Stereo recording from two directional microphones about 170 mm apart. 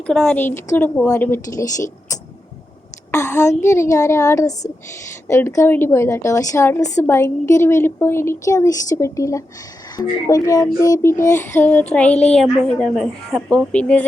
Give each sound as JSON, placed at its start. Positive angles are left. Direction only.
{"t": 0.1, "sound": "child singing", "side_deg": 5}